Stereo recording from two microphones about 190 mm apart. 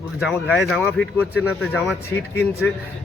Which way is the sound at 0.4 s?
5° left (ahead or behind).